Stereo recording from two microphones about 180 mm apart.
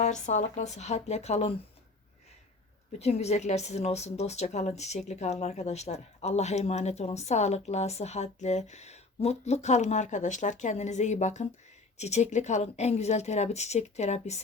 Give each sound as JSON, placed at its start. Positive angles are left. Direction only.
{"t": 0.0, "sound": "speech", "side_deg": 40}
{"t": 3.0, "sound": "speech", "side_deg": 35}